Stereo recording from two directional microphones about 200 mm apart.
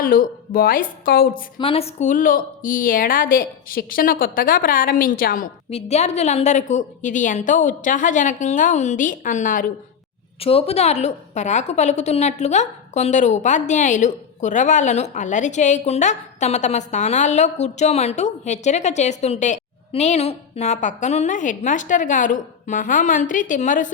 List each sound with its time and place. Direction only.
0.0 s a woman's voice: 45° left (ahead or behind)
1.5 s a woman's voice: 30° left (ahead or behind); by 5.5 s 45° left (ahead or behind)
5.7 s a woman's voice: 35° left (ahead or behind)
10.4 s a woman's voice: 30° left (ahead or behind)